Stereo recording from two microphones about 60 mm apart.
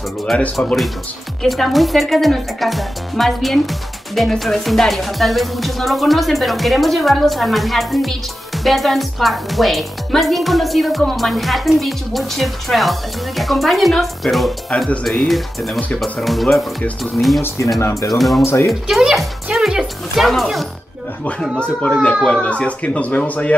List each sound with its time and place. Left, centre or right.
0.6 s speech: centre
1.4 s a woman's voice: centre
17.6 s speech: left
18.1 s a woman's voice: centre
18.4 s speech: left
18.7 s a woman's voice: centre
22.3 s speech: centre